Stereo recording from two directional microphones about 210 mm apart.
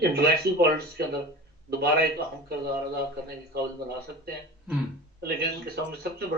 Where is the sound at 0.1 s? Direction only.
50° right (ahead or behind).